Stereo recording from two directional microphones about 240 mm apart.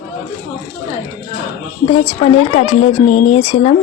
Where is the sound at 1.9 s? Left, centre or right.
Left.